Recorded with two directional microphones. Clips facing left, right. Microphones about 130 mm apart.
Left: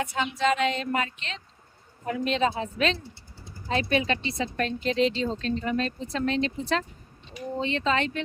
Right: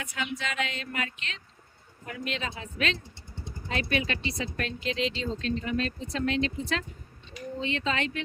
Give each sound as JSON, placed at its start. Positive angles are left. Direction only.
{"t": 0.0, "sound": "speech", "side_deg": 30}